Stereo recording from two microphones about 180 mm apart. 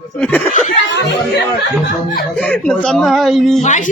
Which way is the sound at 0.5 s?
40° left (ahead or behind).